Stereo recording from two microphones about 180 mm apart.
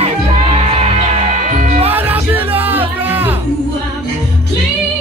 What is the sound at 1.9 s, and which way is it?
Music, 10° right (ahead or behind).